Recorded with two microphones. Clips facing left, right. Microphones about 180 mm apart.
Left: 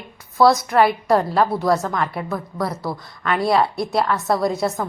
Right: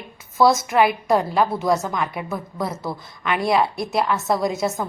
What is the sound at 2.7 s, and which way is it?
Speech, centre (ahead or behind).